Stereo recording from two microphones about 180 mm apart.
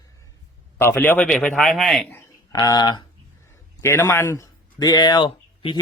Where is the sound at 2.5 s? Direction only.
25° left (ahead or behind).